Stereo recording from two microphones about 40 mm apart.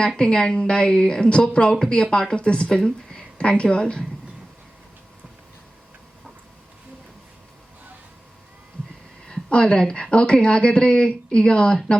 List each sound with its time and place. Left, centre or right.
0.2 s speech: left
9.2 s speech: left